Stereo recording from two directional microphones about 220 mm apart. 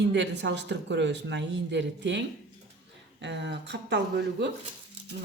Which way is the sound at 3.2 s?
50° right (ahead or behind).